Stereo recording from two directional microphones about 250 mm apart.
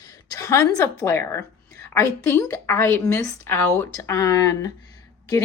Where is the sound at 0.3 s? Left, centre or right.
Centre.